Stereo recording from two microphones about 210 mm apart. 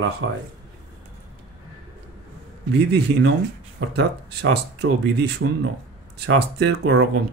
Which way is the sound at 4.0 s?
55° right (ahead or behind).